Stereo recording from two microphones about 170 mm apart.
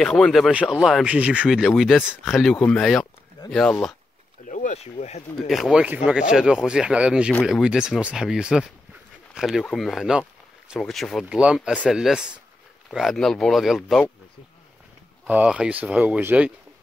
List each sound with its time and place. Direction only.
0.0 s speech: centre (ahead or behind)
4.5 s speech: 50° left (ahead or behind)
5.5 s speech: centre (ahead or behind)
15.2 s speech: 10° right (ahead or behind)